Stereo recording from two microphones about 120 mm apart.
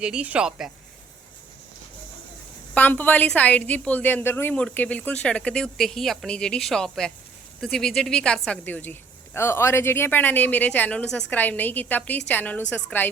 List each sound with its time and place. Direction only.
0.0 s speech: 10° right (ahead or behind)
2.7 s a woman's voice: 15° left (ahead or behind)